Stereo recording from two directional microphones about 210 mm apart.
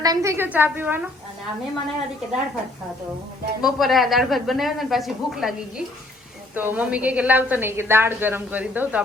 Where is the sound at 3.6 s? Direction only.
Centre (ahead or behind).